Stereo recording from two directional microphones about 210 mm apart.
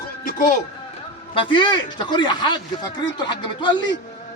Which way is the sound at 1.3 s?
25° left (ahead or behind).